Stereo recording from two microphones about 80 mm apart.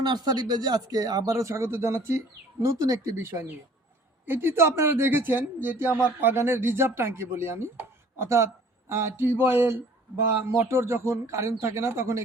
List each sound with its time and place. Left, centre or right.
0.0 s speech: right